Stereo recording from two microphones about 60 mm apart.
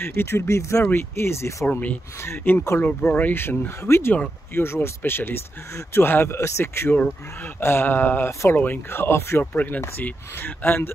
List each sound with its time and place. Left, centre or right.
0.0 s speech: left
0.8 s speech: left
2.2 s speech: left
2.8 s speech: left
8.3 s speech: left
8.5 s speech: left
9.4 s speech: left